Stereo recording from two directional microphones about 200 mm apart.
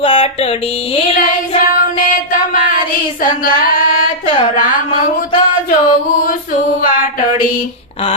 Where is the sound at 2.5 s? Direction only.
45° left (ahead or behind).